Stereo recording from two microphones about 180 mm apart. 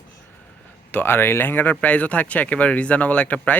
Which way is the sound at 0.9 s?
10° left (ahead or behind).